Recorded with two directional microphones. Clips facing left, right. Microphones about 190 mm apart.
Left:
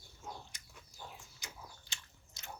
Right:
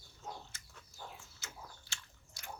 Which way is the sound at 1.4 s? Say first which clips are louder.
Left 1 dB; 15° left (ahead or behind).